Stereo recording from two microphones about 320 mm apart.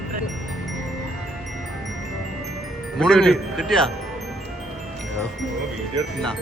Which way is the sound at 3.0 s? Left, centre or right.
Centre.